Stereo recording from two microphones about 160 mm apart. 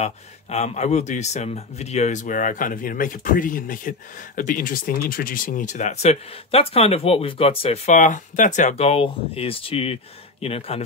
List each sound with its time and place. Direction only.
0.0 s speech: 45° left (ahead or behind)